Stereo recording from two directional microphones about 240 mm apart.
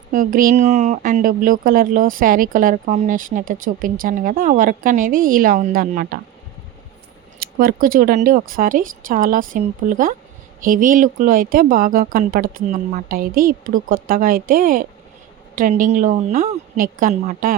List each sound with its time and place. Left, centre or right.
0.1 s speech: right
7.3 s speech: right